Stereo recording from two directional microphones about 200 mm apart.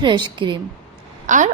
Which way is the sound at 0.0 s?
25° right (ahead or behind).